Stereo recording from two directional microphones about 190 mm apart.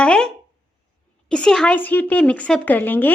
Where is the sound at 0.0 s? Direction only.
5° left (ahead or behind).